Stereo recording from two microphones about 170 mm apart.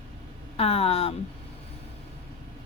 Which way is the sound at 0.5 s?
35° left (ahead or behind).